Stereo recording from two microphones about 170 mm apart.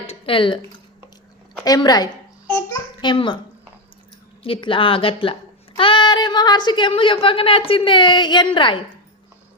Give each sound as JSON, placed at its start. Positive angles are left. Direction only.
{"t": 0.1, "sound": "a sound", "side_deg": 30}
{"t": 1.6, "sound": "a child's voice", "side_deg": 25}
{"t": 2.5, "sound": "babbling", "side_deg": 25}
{"t": 4.4, "sound": "a child's voice", "side_deg": 30}